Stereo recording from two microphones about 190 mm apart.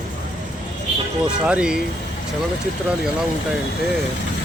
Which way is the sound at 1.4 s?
5° right (ahead or behind).